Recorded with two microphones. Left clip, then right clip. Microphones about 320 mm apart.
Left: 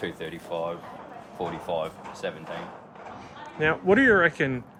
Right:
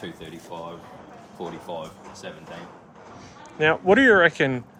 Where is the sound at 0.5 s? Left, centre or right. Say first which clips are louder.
Left 6 dB; left.